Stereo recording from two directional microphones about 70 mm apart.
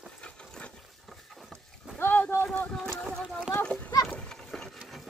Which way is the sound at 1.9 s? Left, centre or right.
Left.